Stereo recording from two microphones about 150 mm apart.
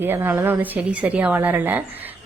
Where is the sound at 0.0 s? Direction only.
15° right (ahead or behind).